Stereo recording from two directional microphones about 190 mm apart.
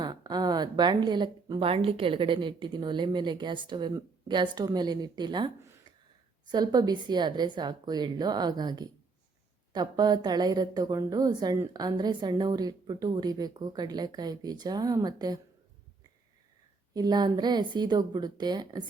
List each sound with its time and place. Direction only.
0.0 s a woman's voice: 20° right (ahead or behind)
6.5 s a woman's voice: 20° right (ahead or behind)
16.9 s a woman's voice: 20° right (ahead or behind)